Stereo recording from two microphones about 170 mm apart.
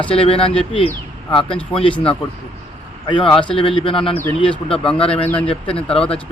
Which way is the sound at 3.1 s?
30° left (ahead or behind).